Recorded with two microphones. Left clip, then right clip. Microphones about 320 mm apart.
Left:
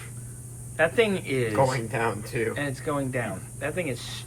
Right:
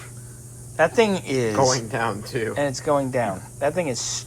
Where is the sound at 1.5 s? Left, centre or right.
Right.